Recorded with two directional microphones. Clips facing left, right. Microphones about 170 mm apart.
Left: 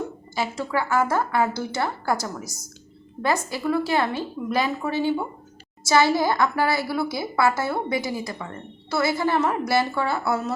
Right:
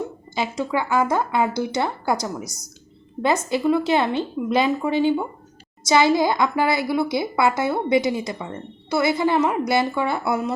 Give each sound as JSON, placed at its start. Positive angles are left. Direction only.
{"t": 0.3, "sound": "a woman's voice", "side_deg": -20}